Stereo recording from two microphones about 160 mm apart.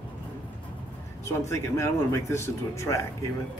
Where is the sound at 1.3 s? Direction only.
20° left (ahead or behind).